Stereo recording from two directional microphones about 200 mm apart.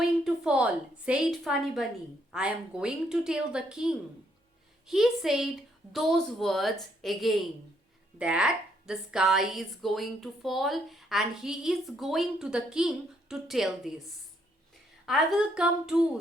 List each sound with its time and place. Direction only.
0.0 s a woman's voice: 5° right (ahead or behind)
15.0 s a woman's voice: centre (ahead or behind)